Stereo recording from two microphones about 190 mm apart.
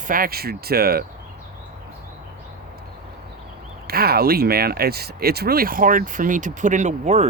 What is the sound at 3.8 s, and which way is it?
Speech, 55° right (ahead or behind).